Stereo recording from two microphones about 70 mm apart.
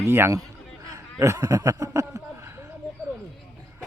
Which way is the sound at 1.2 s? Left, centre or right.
Right.